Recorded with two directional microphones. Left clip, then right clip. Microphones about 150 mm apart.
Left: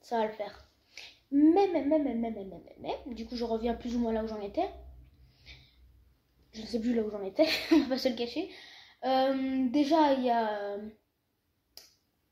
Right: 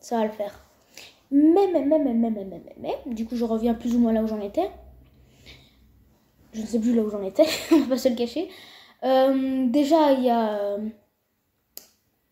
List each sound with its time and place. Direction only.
0.0 s speech: 15° right (ahead or behind)
5.5 s snort: 15° right (ahead or behind)
6.5 s speech: 10° right (ahead or behind)